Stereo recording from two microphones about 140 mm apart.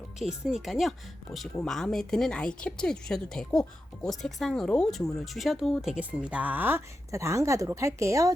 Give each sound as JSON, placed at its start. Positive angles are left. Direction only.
{"t": 0.2, "sound": "speech", "side_deg": -5}